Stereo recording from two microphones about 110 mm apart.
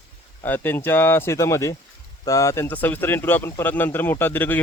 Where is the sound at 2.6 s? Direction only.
15° left (ahead or behind).